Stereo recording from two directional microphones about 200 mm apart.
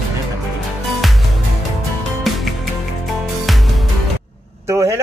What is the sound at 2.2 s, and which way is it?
Music, centre (ahead or behind).